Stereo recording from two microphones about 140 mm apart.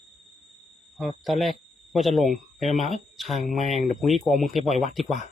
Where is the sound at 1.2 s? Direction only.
Centre (ahead or behind).